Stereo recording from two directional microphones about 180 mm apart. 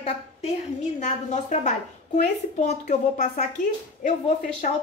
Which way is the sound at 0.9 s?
45° left (ahead or behind).